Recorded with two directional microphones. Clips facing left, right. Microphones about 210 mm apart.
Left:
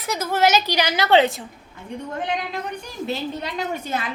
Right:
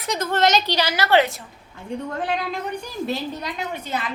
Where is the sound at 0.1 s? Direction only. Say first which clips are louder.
Even; 5° left (ahead or behind).